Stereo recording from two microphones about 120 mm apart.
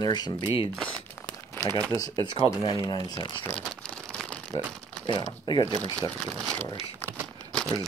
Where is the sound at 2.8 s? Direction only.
35° left (ahead or behind).